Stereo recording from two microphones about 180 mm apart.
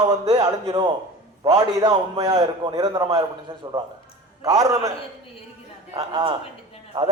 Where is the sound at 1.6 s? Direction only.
20° right (ahead or behind).